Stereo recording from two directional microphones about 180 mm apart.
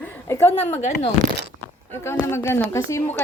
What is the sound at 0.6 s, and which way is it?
Speech, 40° left (ahead or behind).